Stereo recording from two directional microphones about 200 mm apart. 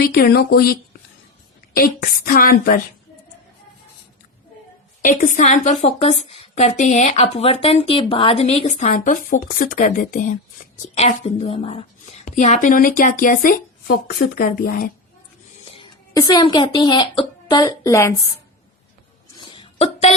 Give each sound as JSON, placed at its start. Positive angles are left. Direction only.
{"t": 0.0, "sound": "speech", "side_deg": 50}
{"t": 5.0, "sound": "a woman's voice", "side_deg": 40}
{"t": 15.7, "sound": "speech", "side_deg": 20}
{"t": 19.4, "sound": "a sound", "side_deg": 25}